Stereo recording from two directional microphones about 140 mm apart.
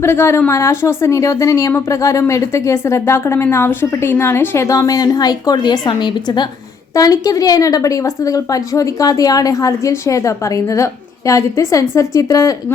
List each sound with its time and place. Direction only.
0.0 s speech: 20° left (ahead or behind)